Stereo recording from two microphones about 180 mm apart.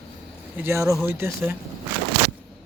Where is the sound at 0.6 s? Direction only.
15° right (ahead or behind).